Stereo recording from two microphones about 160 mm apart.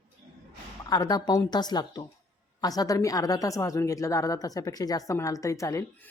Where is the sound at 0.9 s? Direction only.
25° left (ahead or behind).